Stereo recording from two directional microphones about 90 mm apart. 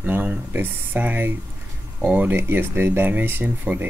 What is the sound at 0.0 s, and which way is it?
Speech, 20° right (ahead or behind).